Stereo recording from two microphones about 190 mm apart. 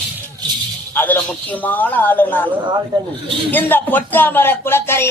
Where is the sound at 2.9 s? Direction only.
25° right (ahead or behind).